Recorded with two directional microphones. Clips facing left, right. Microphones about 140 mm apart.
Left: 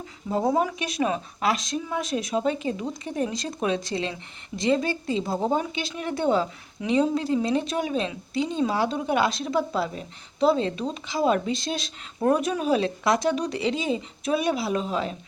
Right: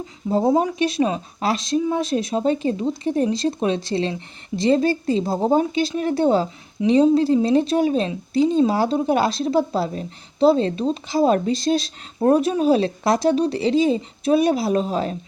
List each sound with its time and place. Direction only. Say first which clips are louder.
0.3 s speech: right 5 dB; 30° right (ahead or behind)